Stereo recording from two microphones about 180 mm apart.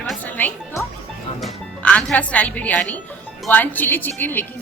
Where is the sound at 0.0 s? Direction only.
10° left (ahead or behind).